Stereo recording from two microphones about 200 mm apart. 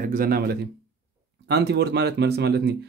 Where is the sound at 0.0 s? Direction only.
45° right (ahead or behind).